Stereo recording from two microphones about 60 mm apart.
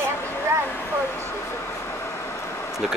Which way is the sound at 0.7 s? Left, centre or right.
Left.